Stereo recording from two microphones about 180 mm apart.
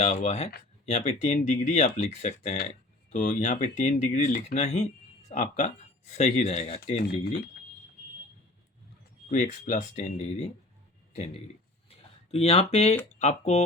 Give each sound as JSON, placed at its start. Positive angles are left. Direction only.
{"t": 0.0, "sound": "speech", "side_deg": 40}
{"t": 7.0, "sound": "speech", "side_deg": 60}
{"t": 9.3, "sound": "speech", "side_deg": 40}
{"t": 11.9, "sound": "a sound", "side_deg": 35}
{"t": 13.1, "sound": "speech", "side_deg": 40}